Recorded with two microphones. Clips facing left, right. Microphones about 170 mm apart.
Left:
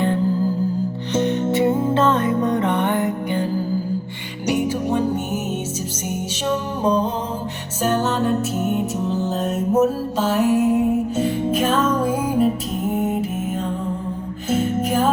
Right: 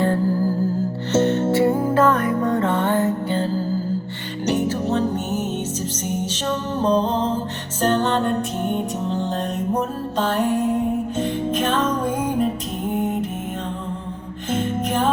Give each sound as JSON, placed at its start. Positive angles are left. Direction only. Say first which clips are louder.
{"t": 0.0, "sound": "music", "louder": "even", "side_deg": 20}
{"t": 6.8, "sound": "music", "louder": "right 2 dB", "side_deg": 10}
{"t": 14.5, "sound": "music", "louder": "left 2 dB", "side_deg": 5}